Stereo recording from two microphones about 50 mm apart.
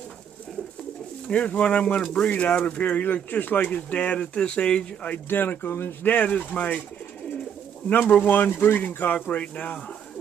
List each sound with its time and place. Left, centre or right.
1.3 s speech: left
5.3 s speech: left
5.7 s a man's voice: left
6.0 s speech: left
7.9 s speech: left